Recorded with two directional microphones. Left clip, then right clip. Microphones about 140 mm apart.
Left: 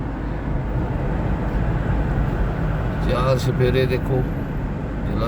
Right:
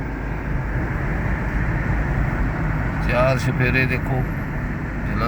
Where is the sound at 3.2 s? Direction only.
15° left (ahead or behind).